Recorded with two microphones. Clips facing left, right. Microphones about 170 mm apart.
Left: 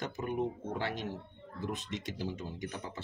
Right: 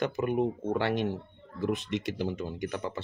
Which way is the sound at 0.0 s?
70° right (ahead or behind).